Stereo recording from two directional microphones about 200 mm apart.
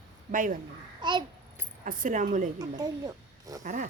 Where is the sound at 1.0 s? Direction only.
20° right (ahead or behind).